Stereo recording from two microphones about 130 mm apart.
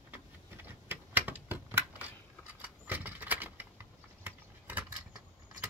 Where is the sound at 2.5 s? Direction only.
15° right (ahead or behind).